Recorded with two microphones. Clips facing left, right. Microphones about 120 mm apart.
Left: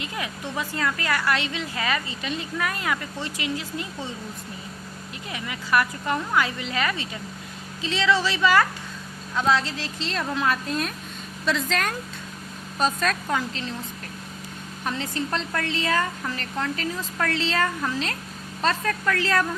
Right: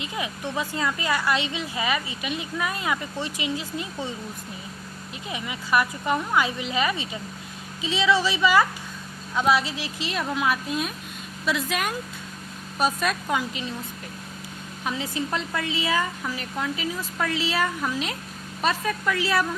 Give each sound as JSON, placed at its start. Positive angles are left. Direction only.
{"t": 0.0, "sound": "a woman's voice", "side_deg": -20}
{"t": 5.3, "sound": "a woman's voice", "side_deg": -20}
{"t": 14.8, "sound": "a woman's voice", "side_deg": -10}